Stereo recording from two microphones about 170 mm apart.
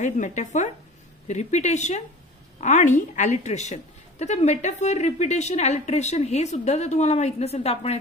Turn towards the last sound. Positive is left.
turn(degrees=40)  # may be behind; listen again after turning